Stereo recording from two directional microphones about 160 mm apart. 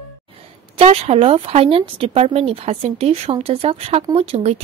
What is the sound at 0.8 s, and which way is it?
Speech, 40° right (ahead or behind).